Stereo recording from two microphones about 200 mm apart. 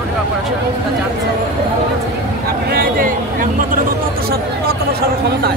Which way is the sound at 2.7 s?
45° right (ahead or behind).